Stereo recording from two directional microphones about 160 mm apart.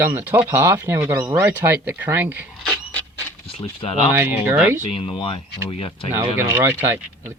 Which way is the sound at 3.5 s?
35° left (ahead or behind).